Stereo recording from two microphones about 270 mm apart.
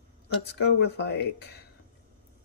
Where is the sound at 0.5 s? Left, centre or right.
Left.